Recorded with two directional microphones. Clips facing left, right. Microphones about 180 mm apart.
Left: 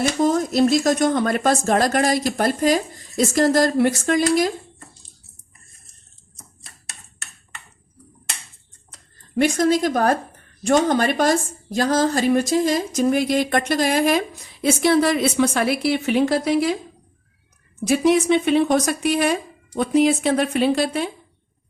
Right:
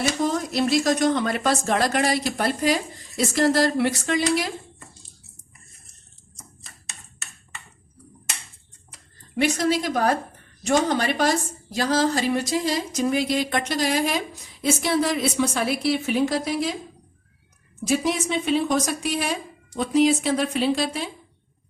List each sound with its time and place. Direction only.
0.2 s a woman's voice: 45° left (ahead or behind)
9.4 s a woman's voice: 45° left (ahead or behind); by 16.7 s 65° left (ahead or behind)
17.8 s speech: 65° left (ahead or behind)